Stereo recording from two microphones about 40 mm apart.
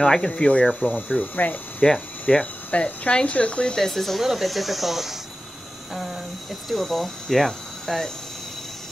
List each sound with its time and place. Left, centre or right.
0.0 s speech: centre
0.4 s speech: left
1.2 s speech: left
1.8 s speech: centre
2.3 s speech: left
3.9 s speech: centre
6.7 s cricket: centre